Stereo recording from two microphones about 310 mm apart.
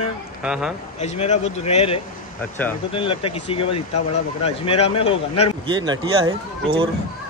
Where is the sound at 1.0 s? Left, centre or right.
Left.